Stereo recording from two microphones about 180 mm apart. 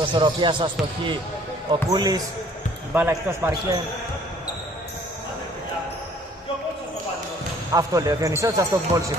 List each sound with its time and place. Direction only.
0.0 s speech: 25° right (ahead or behind)
7.7 s speech: 20° right (ahead or behind)